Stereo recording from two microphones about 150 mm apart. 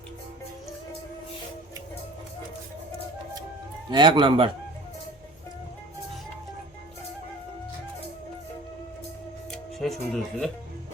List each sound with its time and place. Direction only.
3.8 s a man's voice: 30° right (ahead or behind)
9.5 s music: centre (ahead or behind)